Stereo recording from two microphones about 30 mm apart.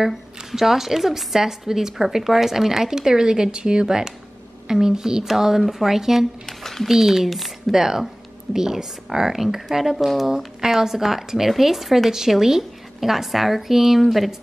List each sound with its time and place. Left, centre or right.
0.0 s a woman's voice: centre
6.4 s a sound: centre
6.9 s a woman's voice: centre
7.7 s a woman's voice: centre